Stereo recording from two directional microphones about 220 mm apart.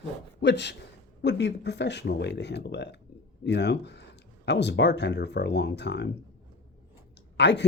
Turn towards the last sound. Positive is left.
turn(degrees=50)  # may be behind; listen again after turning